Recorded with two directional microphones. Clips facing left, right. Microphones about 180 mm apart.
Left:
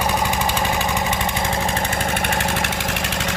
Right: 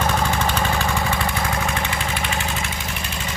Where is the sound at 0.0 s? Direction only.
15° left (ahead or behind).